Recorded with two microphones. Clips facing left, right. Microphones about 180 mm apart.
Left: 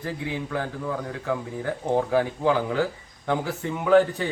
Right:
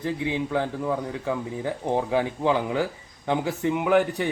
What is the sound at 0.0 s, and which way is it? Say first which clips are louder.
Speech: right 4 dB; 20° right (ahead or behind).